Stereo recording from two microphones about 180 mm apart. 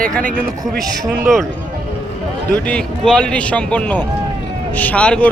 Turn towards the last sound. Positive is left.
turn(degrees=5)  # may be behind; listen again after turning